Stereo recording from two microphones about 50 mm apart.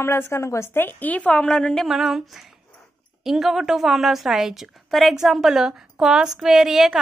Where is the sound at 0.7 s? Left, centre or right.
Left.